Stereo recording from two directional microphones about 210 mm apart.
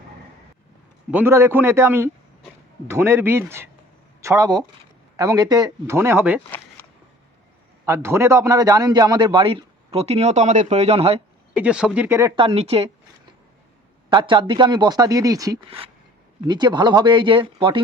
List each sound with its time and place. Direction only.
1.1 s speech: 10° right (ahead or behind)
7.9 s a man's voice: 10° right (ahead or behind); by 11.2 s 30° right (ahead or behind)
11.5 s speech: 5° right (ahead or behind)
12.4 s a man's voice: 30° right (ahead or behind)
14.1 s a man's voice: 25° right (ahead or behind)